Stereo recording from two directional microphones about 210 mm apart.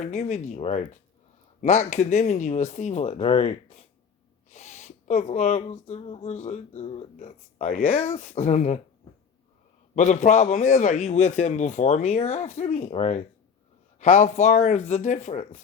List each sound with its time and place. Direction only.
0.0 s speech: 35° left (ahead or behind)
9.9 s speech: 35° left (ahead or behind)